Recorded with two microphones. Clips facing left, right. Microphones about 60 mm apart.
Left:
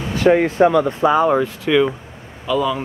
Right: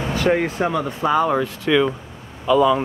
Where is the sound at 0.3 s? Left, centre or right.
Left.